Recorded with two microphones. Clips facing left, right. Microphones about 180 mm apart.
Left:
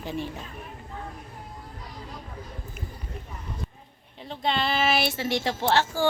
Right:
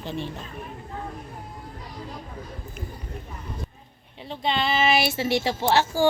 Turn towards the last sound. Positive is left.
turn(degrees=-10)  # may be behind; listen again after turning